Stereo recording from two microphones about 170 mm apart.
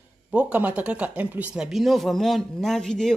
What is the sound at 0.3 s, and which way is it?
Speech, 10° right (ahead or behind).